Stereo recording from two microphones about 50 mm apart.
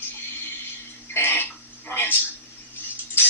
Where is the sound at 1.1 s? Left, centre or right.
Left.